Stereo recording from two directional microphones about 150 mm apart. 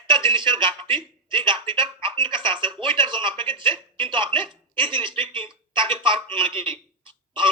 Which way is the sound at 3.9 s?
35° right (ahead or behind).